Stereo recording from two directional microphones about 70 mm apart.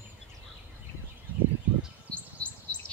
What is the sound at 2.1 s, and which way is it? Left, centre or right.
Chirp, centre.